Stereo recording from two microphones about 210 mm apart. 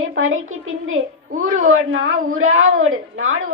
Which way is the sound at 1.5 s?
75° right (ahead or behind).